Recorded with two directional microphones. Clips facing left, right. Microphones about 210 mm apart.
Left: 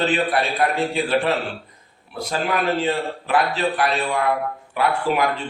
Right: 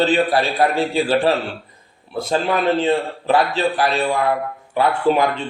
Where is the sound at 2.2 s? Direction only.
25° right (ahead or behind).